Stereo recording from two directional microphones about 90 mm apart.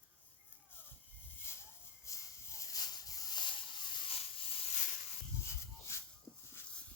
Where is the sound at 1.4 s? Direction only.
30° left (ahead or behind); by 4.5 s 90° left.